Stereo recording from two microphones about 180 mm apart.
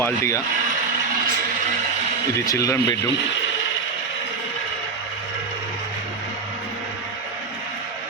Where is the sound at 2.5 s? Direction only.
20° left (ahead or behind).